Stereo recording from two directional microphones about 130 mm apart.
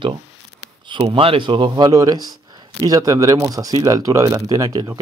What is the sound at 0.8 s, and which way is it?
Speech, 40° right (ahead or behind).